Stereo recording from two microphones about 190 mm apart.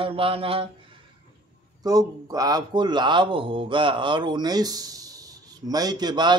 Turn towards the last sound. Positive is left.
turn(degrees=-20)  # may be behind; listen again after turning